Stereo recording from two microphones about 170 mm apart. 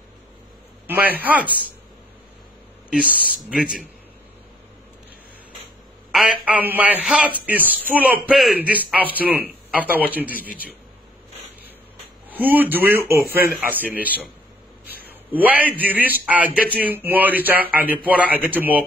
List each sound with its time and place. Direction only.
0.8 s a man's voice: 10° right (ahead or behind)
3.0 s speech: 60° left (ahead or behind)
3.4 s speech: 5° right (ahead or behind)
6.1 s a man's voice: 5° right (ahead or behind)
12.3 s a man's voice: 10° right (ahead or behind)